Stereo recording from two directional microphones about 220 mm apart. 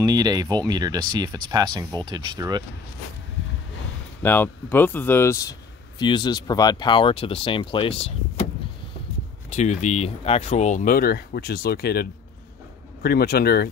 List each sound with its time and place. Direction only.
0.0 s speech: 15° right (ahead or behind)
4.2 s speech: 10° left (ahead or behind); by 8.1 s 25° left (ahead or behind)
9.5 s speech: 30° left (ahead or behind)